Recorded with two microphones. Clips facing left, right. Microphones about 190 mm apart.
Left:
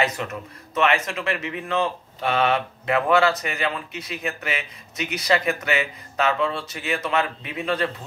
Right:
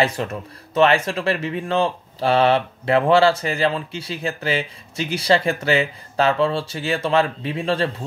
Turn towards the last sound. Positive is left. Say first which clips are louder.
# right 3 dB
turn(degrees=-30)  # may be behind; listen again after turning